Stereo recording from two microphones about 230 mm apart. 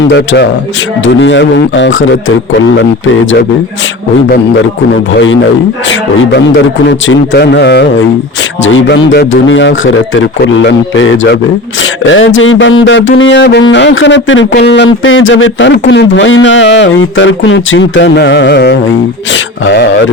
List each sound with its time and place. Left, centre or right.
1.0 s music: left
6.8 s music: left